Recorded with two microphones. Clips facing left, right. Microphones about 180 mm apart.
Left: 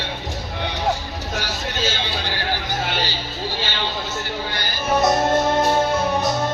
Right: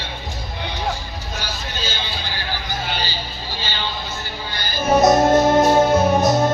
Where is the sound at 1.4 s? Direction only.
75° left (ahead or behind).